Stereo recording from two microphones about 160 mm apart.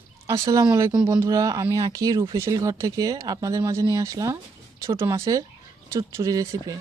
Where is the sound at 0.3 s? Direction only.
20° right (ahead or behind).